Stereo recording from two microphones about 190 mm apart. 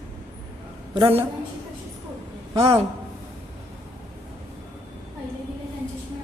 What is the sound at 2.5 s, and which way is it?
Speech, 25° right (ahead or behind).